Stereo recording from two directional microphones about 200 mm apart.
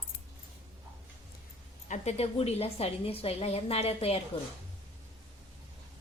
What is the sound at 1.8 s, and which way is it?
A woman's voice, 35° left (ahead or behind).